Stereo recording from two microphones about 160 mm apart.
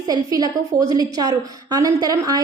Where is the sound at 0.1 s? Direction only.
25° right (ahead or behind).